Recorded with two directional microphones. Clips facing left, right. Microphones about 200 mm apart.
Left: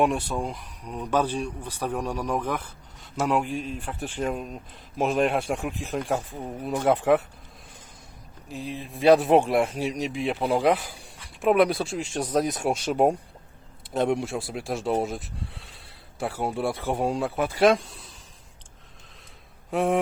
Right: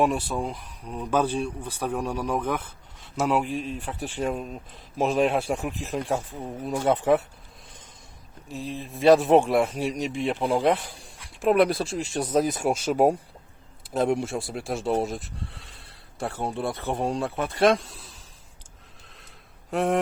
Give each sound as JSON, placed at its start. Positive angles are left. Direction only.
{"t": 0.0, "sound": "speech", "side_deg": 0}
{"t": 8.4, "sound": "speech", "side_deg": 0}
{"t": 19.7, "sound": "speech", "side_deg": 0}